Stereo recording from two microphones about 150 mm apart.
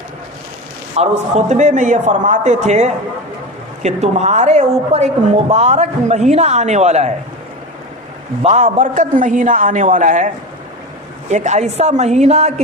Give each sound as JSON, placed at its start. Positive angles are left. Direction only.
{"t": 0.9, "sound": "a woman's voice", "side_deg": -50}
{"t": 8.4, "sound": "a man's voice", "side_deg": -55}